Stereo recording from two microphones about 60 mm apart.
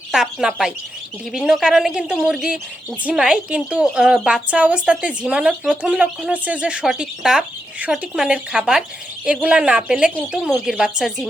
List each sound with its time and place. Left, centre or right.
0.1 s a woman's voice: centre; by 6.8 s right
6.8 s a woman's voice: centre